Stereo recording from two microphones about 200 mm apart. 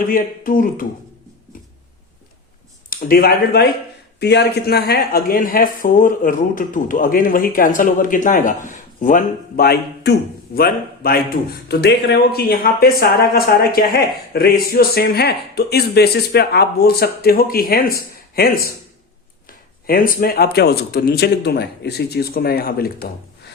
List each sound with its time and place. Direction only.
0.1 s speech: 45° left (ahead or behind)
2.9 s speech: 50° left (ahead or behind)
19.9 s speech: 45° left (ahead or behind)